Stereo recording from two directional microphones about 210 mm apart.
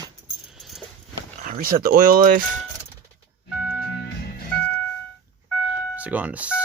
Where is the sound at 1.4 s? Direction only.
40° right (ahead or behind).